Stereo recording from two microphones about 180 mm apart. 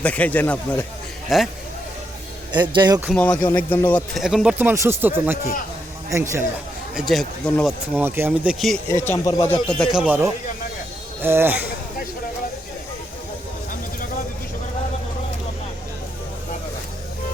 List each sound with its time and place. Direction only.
0.0 s speech: 5° left (ahead or behind)
1.3 s speech: centre (ahead or behind)
2.5 s speech: 25° right (ahead or behind)
3.1 s speech: 5° left (ahead or behind)
4.2 s speech: centre (ahead or behind)
6.9 s speech: centre (ahead or behind)
7.9 s speech: 10° right (ahead or behind)
8.5 s speech: centre (ahead or behind)
8.9 s speech: 15° left (ahead or behind)
9.8 s speech: 5° right (ahead or behind)